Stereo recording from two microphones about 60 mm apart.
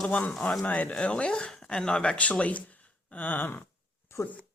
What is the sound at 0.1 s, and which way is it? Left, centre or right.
Speech, centre.